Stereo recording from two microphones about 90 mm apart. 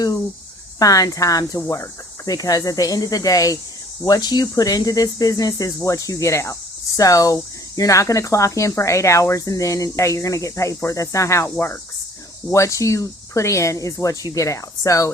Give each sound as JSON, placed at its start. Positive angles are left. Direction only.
{"t": 0.8, "sound": "speech", "side_deg": 40}